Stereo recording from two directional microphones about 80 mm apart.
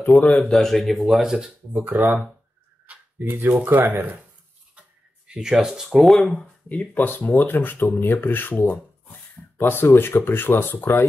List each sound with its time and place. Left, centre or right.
0.0 s speech: centre
0.6 s speech: centre
1.7 s speech: right
2.9 s a sound: right
3.5 s speech: right
4.7 s speech: centre
6.7 s speech: left